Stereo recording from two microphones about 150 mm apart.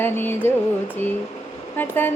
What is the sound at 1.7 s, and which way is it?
Speech, 15° left (ahead or behind).